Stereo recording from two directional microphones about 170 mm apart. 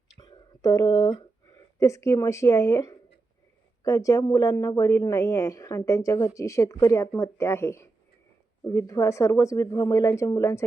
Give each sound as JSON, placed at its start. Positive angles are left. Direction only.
{"t": 0.2, "sound": "speech", "side_deg": 20}